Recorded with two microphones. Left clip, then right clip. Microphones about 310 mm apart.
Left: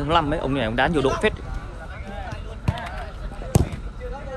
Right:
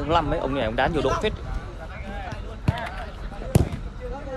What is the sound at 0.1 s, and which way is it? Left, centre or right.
Speech, left.